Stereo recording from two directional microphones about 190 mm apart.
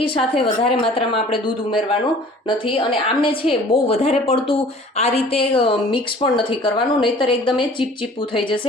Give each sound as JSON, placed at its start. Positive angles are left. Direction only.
{"t": 0.0, "sound": "a woman's voice", "side_deg": 30}